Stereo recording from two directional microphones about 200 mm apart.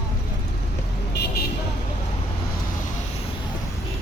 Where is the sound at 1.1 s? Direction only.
55° left (ahead or behind).